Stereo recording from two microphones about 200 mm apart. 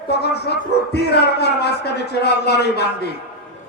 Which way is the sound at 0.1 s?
55° left (ahead or behind).